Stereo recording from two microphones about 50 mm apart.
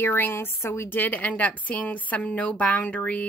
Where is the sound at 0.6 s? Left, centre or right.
Left.